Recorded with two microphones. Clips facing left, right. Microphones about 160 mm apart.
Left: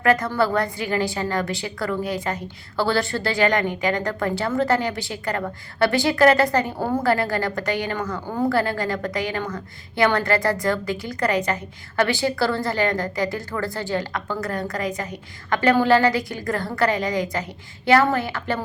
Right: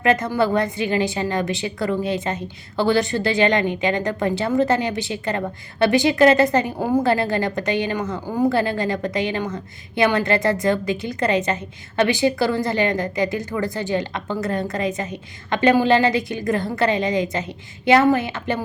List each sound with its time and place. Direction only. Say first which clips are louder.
0.0 s a woman's voice: right 1 dB; 20° right (ahead or behind)